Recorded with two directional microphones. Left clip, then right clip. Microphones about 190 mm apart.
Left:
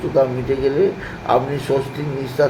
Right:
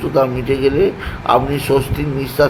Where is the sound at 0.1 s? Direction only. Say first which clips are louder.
Right 2 dB; 15° right (ahead or behind).